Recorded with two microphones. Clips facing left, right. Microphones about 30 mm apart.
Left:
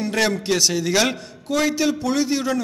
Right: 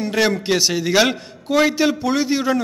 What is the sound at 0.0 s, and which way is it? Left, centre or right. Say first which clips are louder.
A man's voice: right 2 dB; centre.